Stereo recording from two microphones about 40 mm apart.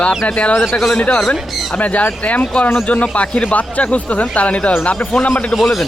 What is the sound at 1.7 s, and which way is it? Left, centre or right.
Speech, left.